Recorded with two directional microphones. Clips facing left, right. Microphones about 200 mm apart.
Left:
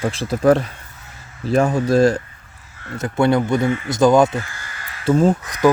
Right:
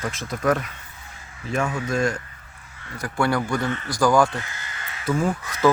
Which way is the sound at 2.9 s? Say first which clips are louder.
Left 6 dB; 25° left (ahead or behind).